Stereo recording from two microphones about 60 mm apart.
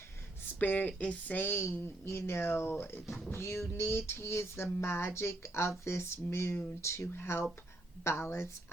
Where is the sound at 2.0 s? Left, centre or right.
Left.